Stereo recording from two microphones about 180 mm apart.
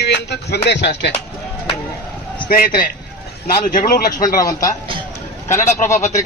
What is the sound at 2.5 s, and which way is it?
A man's voice, 55° left (ahead or behind).